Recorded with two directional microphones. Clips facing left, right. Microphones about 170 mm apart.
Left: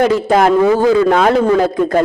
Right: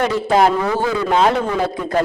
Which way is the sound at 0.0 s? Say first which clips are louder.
Left 4 dB; 45° left (ahead or behind).